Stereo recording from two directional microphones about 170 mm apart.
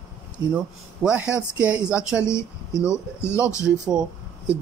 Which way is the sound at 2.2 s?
15° left (ahead or behind).